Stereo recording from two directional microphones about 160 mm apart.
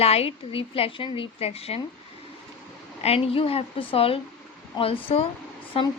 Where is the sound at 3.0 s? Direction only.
40° left (ahead or behind).